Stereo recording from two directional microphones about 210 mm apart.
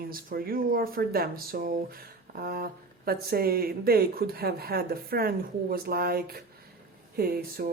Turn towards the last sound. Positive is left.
turn(degrees=-45)  # may be behind; listen again after turning